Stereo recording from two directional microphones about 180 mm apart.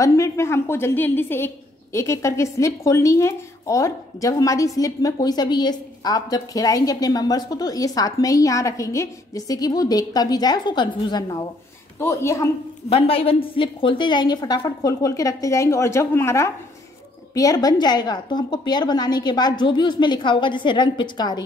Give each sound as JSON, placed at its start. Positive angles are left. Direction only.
{"t": 0.0, "sound": "a woman's voice", "side_deg": 15}
{"t": 12.9, "sound": "a woman's voice", "side_deg": 30}